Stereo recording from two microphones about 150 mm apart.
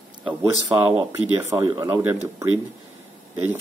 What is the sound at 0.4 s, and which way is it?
Speech, 20° right (ahead or behind).